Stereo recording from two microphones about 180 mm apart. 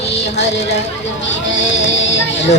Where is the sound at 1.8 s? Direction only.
90° left.